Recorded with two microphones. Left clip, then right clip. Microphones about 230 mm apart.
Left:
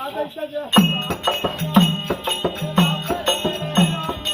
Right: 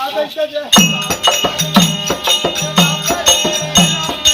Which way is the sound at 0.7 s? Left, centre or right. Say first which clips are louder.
Right 7 dB; centre.